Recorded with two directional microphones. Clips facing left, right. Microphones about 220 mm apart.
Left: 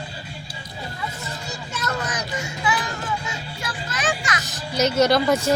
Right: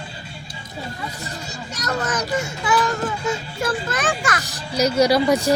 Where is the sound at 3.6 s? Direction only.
55° right (ahead or behind).